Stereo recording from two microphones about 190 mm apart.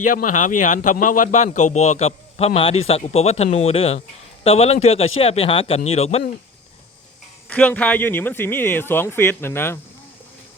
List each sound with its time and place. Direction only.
0.0 s a man's voice: 45° left (ahead or behind)
7.4 s speech: 10° left (ahead or behind)